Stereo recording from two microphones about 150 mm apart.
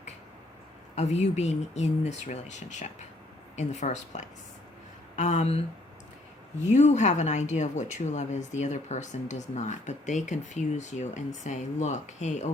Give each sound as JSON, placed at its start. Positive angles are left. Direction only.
{"t": 0.9, "sound": "speech", "side_deg": 50}
{"t": 6.7, "sound": "speech", "side_deg": 50}